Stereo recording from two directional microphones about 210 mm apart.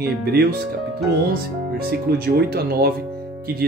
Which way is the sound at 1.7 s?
45° right (ahead or behind).